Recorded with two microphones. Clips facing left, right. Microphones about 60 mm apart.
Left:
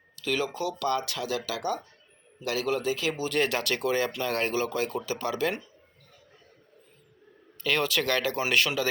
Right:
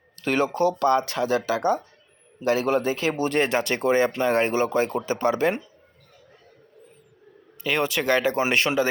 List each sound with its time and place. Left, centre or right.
0.2 s speech: right
7.6 s speech: centre